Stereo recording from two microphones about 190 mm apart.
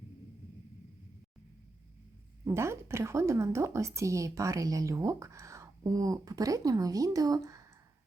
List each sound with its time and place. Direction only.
2.4 s a woman's voice: 15° right (ahead or behind)